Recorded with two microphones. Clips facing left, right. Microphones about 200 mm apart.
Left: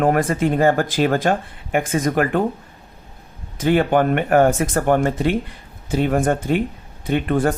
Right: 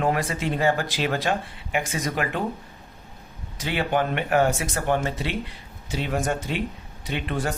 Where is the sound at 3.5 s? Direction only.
50° left (ahead or behind).